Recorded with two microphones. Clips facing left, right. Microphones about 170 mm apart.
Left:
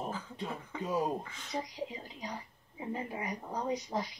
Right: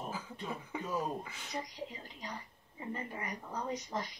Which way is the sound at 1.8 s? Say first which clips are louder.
Left 4 dB; 20° left (ahead or behind).